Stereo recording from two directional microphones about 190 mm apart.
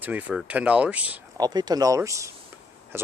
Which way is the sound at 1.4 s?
20° right (ahead or behind).